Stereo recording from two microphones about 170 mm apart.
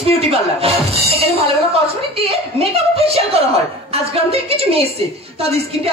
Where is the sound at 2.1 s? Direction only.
35° right (ahead or behind).